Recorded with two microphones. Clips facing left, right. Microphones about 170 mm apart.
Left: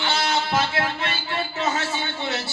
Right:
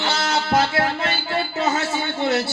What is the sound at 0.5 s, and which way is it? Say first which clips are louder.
Music: right 4 dB; 40° right (ahead or behind).